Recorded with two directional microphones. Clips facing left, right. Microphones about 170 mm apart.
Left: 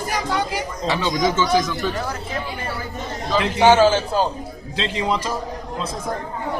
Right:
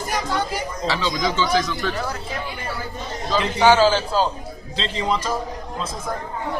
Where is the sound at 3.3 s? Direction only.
5° left (ahead or behind).